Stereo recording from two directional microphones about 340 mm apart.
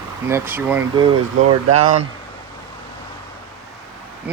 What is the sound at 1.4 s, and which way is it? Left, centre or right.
Speech, centre.